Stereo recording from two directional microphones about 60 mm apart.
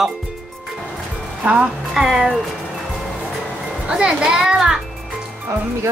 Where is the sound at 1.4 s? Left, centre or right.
Right.